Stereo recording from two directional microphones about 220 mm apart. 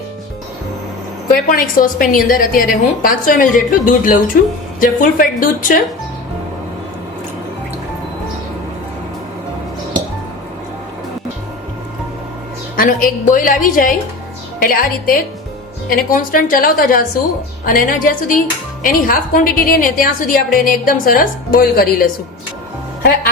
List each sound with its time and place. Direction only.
1.5 s speech: 40° left (ahead or behind)
12.7 s speech: 40° left (ahead or behind)